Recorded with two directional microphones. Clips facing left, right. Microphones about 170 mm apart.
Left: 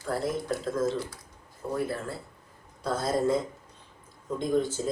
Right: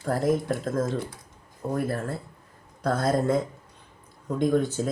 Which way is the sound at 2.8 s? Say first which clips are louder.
Right 3 dB; 60° right (ahead or behind).